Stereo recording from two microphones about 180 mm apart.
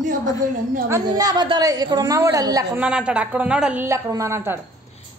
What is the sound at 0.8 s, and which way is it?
A woman's voice, 20° right (ahead or behind).